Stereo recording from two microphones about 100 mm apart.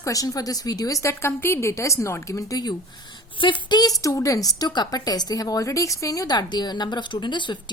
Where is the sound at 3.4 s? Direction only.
50° left (ahead or behind).